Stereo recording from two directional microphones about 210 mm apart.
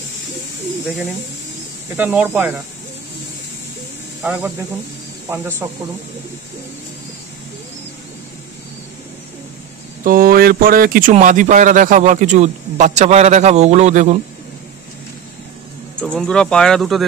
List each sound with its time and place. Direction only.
0.8 s speech: centre (ahead or behind)
4.2 s speech: 10° right (ahead or behind)
10.0 s speech: 45° right (ahead or behind)
16.0 s speech: 5° left (ahead or behind)